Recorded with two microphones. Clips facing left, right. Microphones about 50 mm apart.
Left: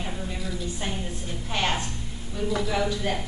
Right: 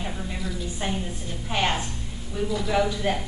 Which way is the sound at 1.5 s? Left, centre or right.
Centre.